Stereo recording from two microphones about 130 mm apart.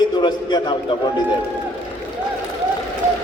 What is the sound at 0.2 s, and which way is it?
Speech, 35° left (ahead or behind).